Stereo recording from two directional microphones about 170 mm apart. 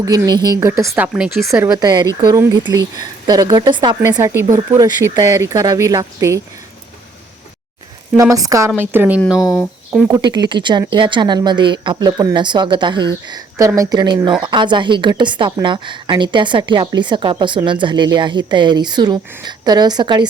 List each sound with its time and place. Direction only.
0.0 s a woman's voice: 20° right (ahead or behind)
0.9 s speech: 5° right (ahead or behind)
1.7 s a woman's voice: 25° right (ahead or behind)
4.0 s speech: 15° right (ahead or behind)
8.1 s speech: 20° right (ahead or behind)
9.4 s speech: 20° left (ahead or behind)
10.1 s a woman's voice: 25° right (ahead or behind)